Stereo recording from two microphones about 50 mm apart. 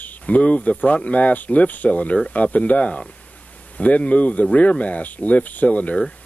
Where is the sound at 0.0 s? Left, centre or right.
Left.